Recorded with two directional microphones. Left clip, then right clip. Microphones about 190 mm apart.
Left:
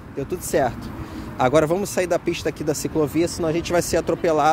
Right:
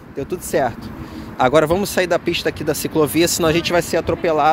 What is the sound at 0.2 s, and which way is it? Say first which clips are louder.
Speech: right 2 dB; 5° left (ahead or behind).